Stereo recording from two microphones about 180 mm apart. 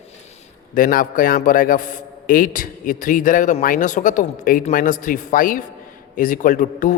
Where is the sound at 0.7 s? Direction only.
50° left (ahead or behind).